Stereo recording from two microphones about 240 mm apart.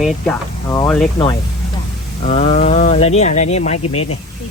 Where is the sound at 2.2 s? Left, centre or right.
Left.